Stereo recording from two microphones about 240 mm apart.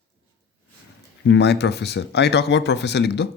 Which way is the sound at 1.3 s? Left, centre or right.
Left.